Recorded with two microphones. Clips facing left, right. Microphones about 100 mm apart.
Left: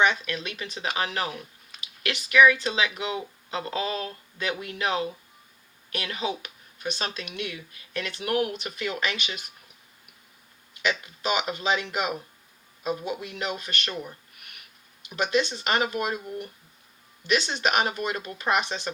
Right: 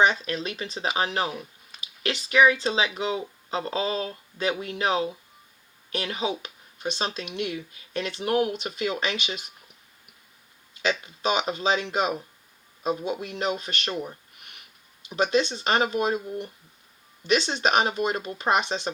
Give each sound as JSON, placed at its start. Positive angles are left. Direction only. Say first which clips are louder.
{"t": 0.0, "sound": "speech", "louder": "right 2 dB", "side_deg": -35}
{"t": 10.8, "sound": "speech", "louder": "right 2 dB", "side_deg": -30}
{"t": 14.1, "sound": "a sound", "louder": "right 2 dB", "side_deg": -25}
{"t": 15.1, "sound": "speech", "louder": "right 2 dB", "side_deg": -30}